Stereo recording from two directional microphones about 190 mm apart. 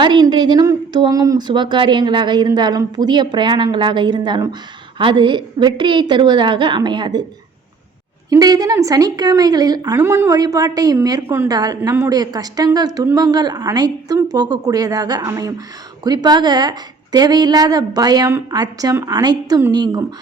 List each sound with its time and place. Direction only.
0.0 s a woman's voice: 25° right (ahead or behind)
8.3 s a woman's voice: 20° right (ahead or behind)